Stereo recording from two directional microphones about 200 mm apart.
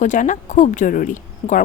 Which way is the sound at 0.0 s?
40° left (ahead or behind).